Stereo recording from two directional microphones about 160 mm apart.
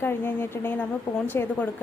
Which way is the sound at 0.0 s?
15° left (ahead or behind).